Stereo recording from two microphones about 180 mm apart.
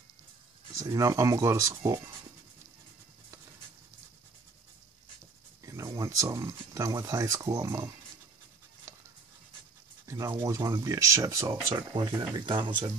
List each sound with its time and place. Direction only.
0.7 s speech: 15° right (ahead or behind)
5.7 s speech: 15° right (ahead or behind)
10.0 s speech: 15° right (ahead or behind)